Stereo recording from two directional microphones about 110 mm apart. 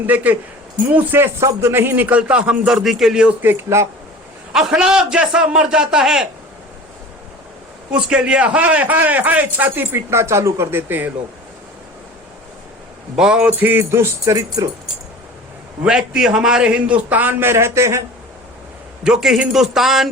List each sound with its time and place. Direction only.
0.1 s a man's voice: 15° right (ahead or behind)
0.9 s music: 20° right (ahead or behind)
1.5 s a man's voice: 25° right (ahead or behind)
4.5 s a man's voice: 5° right (ahead or behind)
7.9 s a man's voice: 10° right (ahead or behind)
13.1 s a man's voice: 5° right (ahead or behind)
13.5 s music: 15° right (ahead or behind)
15.8 s a man's voice: 5° right (ahead or behind); by 18.0 s 25° right (ahead or behind)
19.0 s a man's voice: 5° right (ahead or behind)